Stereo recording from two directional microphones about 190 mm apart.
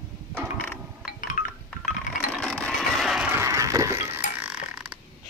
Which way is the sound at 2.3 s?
5° left (ahead or behind).